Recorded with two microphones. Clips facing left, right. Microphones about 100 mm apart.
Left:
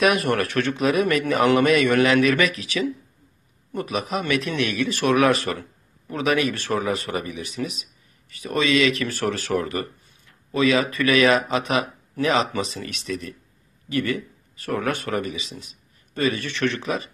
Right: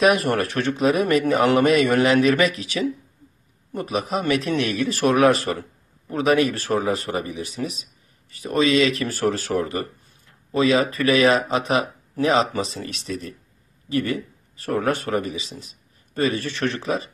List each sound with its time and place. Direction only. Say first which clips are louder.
0.0 s speech: right 2 dB; 30° right (ahead or behind)